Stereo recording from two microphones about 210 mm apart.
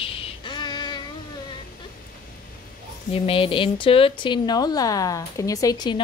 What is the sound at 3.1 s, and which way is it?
Speech, 25° left (ahead or behind).